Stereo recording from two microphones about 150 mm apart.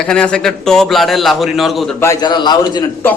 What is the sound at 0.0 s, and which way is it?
A man's voice, 5° left (ahead or behind).